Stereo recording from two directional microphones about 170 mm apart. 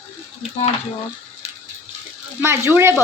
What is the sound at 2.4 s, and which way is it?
Speech, 15° right (ahead or behind).